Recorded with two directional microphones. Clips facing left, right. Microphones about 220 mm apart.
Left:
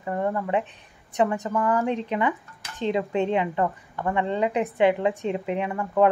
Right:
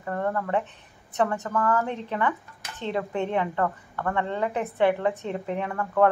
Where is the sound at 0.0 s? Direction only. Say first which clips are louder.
Left 2 dB; 15° left (ahead or behind).